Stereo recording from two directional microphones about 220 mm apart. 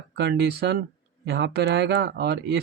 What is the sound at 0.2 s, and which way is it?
Speech, 50° right (ahead or behind).